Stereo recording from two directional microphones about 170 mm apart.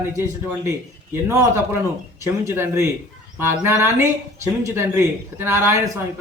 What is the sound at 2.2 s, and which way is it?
Speech, 15° right (ahead or behind).